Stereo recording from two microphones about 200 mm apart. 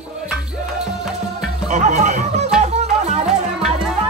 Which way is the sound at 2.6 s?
35° right (ahead or behind).